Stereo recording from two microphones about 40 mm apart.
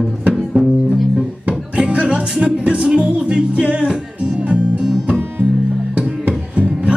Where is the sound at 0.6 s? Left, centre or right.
Right.